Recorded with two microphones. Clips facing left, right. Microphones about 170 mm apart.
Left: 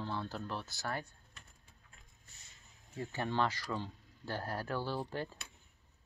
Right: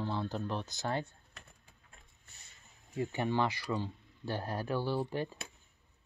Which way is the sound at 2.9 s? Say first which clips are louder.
Right 5 dB; 15° right (ahead or behind).